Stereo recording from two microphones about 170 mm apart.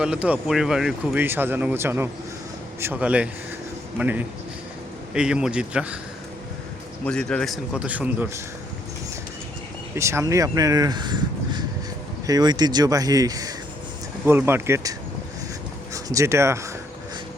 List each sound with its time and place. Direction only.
0.0 s speech: 5° right (ahead or behind)
7.0 s a man's voice: 5° left (ahead or behind)
9.9 s speech: 15° right (ahead or behind)